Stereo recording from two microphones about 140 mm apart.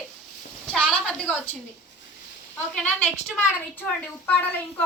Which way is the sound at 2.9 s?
10° left (ahead or behind).